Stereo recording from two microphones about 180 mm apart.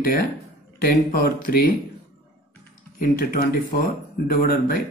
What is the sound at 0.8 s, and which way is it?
Speech, 55° left (ahead or behind).